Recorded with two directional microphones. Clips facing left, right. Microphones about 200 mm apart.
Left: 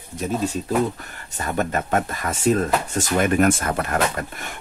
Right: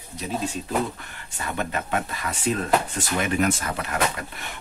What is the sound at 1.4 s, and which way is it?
Speech, 45° left (ahead or behind).